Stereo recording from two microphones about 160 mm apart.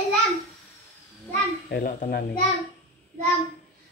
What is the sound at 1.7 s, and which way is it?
Speech, 65° left (ahead or behind).